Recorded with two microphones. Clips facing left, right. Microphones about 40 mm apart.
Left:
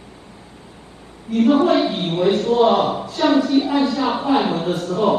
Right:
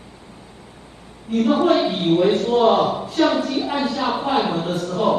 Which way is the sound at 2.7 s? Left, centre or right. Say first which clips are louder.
Even; left.